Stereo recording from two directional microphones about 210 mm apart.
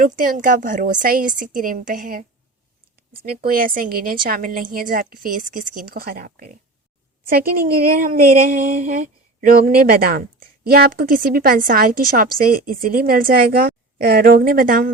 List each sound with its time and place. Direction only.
0.0 s a woman's voice: 40° right (ahead or behind)
3.2 s a woman's voice: 45° right (ahead or behind)